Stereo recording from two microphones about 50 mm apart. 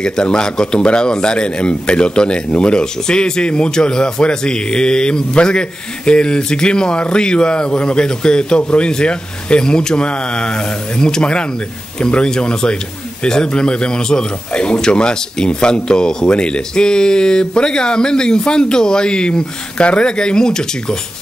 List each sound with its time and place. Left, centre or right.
0.0 s a man's voice: centre